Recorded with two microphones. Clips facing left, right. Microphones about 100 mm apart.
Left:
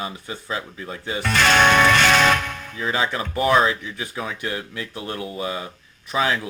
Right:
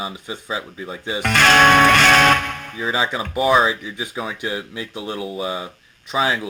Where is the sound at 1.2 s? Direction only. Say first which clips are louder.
Right 3 dB; 55° right (ahead or behind).